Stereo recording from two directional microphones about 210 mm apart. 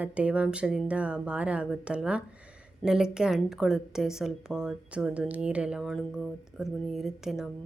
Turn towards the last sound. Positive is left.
turn(degrees=0)  # may be behind; listen again after turning